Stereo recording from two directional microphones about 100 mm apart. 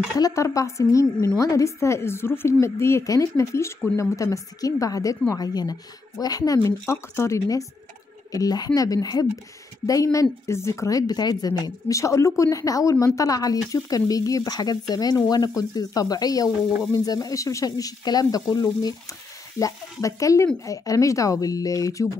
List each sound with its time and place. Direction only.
0.2 s a woman's voice: 30° left (ahead or behind)